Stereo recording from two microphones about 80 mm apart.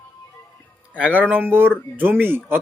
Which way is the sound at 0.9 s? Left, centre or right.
Centre.